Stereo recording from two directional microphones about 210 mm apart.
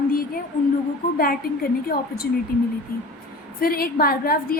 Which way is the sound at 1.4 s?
45° left (ahead or behind).